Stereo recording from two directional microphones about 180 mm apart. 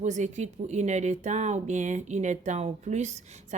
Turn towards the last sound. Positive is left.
turn(degrees=-40)  # may be behind; listen again after turning